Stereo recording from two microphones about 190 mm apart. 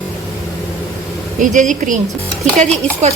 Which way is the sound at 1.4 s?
40° right (ahead or behind).